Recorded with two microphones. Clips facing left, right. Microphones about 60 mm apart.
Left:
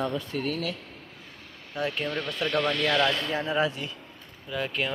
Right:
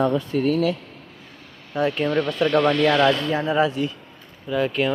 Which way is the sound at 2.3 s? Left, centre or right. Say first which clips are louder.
Right 6 dB; centre.